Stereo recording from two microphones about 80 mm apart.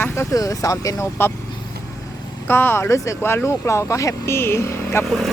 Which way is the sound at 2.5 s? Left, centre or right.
Left.